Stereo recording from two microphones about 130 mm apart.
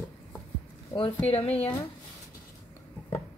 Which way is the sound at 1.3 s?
45° left (ahead or behind).